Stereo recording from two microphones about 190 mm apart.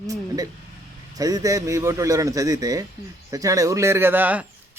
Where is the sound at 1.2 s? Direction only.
20° right (ahead or behind).